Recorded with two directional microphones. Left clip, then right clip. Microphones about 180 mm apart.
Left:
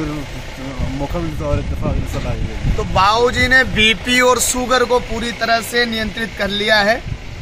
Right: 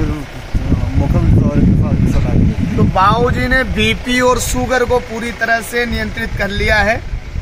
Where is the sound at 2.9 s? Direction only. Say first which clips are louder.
Even; 60° right (ahead or behind); by 5.0 s 25° right (ahead or behind).